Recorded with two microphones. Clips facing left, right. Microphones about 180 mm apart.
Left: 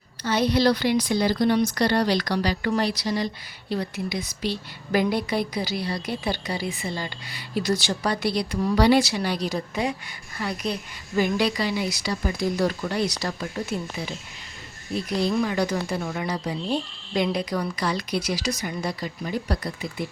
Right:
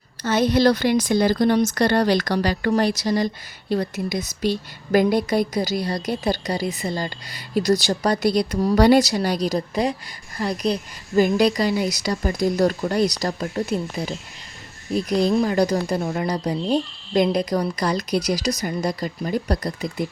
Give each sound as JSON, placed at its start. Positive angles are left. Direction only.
{"t": 0.2, "sound": "a woman's voice", "side_deg": -45}
{"t": 15.1, "sound": "a woman's voice", "side_deg": -35}